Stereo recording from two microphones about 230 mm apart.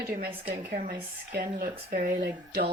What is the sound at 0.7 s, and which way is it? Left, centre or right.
Speech, right.